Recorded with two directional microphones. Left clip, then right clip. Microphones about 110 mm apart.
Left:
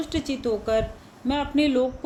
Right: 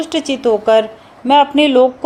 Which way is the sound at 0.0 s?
55° right (ahead or behind).